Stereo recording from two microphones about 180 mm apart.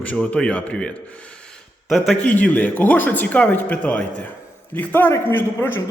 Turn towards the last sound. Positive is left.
turn(degrees=10)  # may be behind; listen again after turning